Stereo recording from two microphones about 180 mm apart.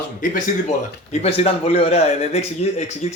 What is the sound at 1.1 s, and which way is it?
A man's voice, 35° left (ahead or behind).